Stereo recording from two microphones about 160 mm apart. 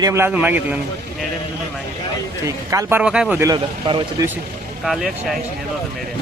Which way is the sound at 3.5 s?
30° right (ahead or behind).